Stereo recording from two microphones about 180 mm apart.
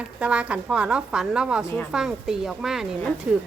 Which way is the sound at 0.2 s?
5° right (ahead or behind).